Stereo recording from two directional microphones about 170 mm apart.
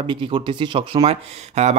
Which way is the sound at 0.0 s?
30° right (ahead or behind).